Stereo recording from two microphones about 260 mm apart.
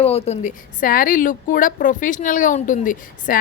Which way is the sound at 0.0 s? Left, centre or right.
Left.